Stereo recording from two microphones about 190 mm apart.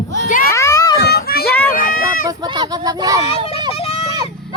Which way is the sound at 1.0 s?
55° left (ahead or behind).